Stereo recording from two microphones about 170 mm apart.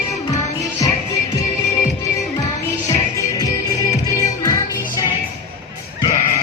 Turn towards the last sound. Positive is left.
turn(degrees=20)  # may be behind; listen again after turning